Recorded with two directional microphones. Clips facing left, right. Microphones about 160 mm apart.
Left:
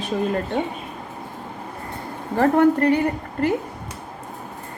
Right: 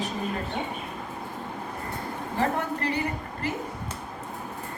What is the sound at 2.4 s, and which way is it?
A woman's voice, 55° left (ahead or behind).